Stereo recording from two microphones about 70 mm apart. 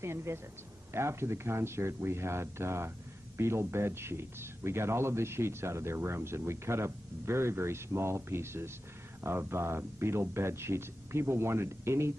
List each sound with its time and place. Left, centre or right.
0.0 s speech: right